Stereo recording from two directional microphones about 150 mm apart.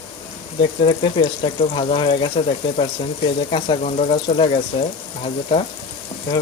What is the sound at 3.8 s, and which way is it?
Speech, 45° left (ahead or behind).